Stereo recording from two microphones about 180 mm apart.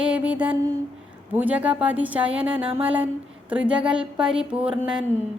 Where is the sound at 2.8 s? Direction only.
10° right (ahead or behind).